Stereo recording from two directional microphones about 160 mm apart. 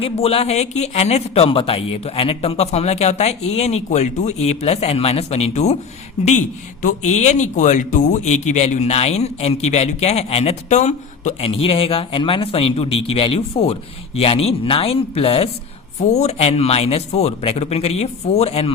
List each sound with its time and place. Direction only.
0.0 s speech: 40° left (ahead or behind)
6.8 s a man's voice: 45° left (ahead or behind)